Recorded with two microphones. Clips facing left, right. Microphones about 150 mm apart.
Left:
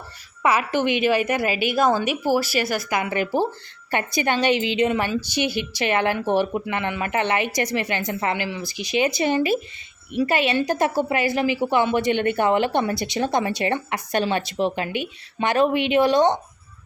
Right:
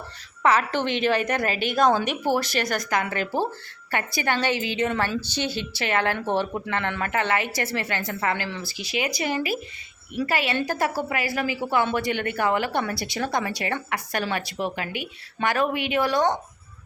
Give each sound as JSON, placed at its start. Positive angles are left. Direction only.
{"t": 0.4, "sound": "a woman's voice", "side_deg": 10}